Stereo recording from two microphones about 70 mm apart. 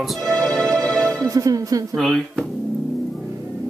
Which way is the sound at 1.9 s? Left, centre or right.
Centre.